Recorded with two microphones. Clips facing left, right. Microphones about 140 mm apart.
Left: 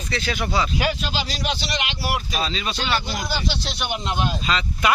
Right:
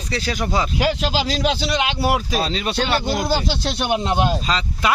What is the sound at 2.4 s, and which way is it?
Speech, 60° right (ahead or behind).